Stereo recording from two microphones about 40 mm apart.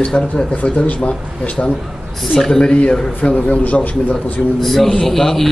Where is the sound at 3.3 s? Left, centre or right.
Left.